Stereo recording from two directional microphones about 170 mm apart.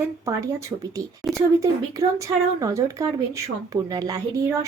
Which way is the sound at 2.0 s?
20° right (ahead or behind).